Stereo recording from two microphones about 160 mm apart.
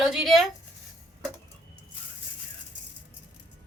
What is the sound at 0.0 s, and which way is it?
Speech, centre (ahead or behind).